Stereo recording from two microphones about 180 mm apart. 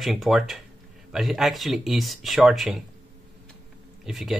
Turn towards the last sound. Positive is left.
turn(degrees=0)  # may be behind; listen again after turning